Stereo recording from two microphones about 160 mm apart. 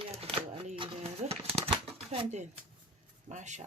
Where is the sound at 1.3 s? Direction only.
35° right (ahead or behind).